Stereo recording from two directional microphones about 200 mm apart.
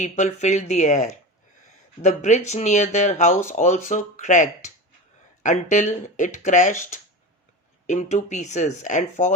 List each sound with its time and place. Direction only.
0.0 s speech: 35° left (ahead or behind)
7.9 s speech: 35° left (ahead or behind)